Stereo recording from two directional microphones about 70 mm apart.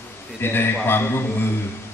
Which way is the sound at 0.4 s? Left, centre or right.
Left.